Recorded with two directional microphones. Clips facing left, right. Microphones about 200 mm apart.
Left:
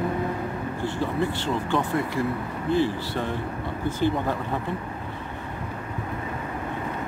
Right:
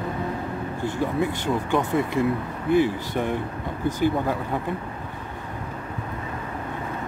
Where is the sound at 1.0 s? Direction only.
15° right (ahead or behind).